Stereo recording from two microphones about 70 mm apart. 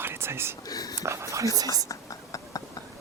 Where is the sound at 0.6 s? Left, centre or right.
Left.